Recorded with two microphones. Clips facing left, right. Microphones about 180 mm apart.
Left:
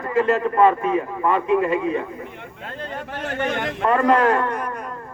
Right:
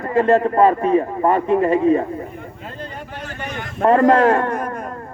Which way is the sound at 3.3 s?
65° left (ahead or behind).